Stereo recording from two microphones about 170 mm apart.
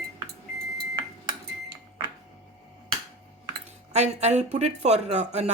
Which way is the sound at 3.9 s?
40° right (ahead or behind).